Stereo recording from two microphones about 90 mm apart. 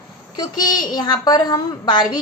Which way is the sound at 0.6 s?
50° left (ahead or behind).